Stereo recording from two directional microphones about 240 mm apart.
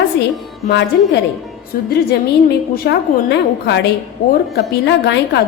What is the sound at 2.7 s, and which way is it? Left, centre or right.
A woman's voice, left.